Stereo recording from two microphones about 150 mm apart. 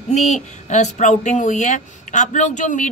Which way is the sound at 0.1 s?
50° left (ahead or behind).